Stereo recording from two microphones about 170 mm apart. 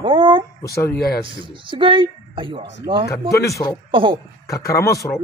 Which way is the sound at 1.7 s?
30° right (ahead or behind).